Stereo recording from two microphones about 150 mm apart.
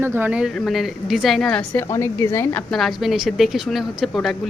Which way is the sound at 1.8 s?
15° left (ahead or behind).